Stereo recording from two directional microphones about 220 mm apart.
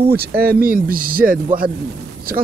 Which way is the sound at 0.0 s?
45° right (ahead or behind).